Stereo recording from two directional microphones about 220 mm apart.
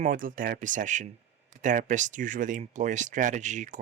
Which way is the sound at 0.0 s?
40° right (ahead or behind).